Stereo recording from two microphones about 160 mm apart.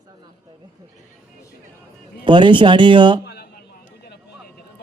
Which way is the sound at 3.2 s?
90° left.